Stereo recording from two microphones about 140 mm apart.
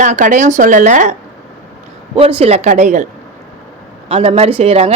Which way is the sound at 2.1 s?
45° right (ahead or behind).